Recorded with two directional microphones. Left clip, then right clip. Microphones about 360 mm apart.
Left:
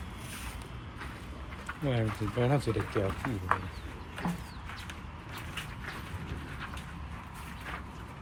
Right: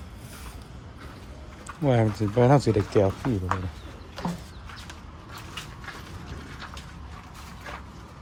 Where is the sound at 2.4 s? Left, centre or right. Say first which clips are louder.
Right 10 dB; centre.